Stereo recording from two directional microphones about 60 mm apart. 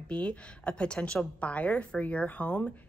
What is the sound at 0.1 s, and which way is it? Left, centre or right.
A woman's voice, centre.